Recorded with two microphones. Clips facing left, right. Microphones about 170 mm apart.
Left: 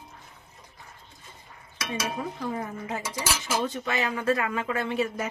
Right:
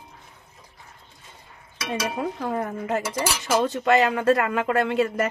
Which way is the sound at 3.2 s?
70° right (ahead or behind).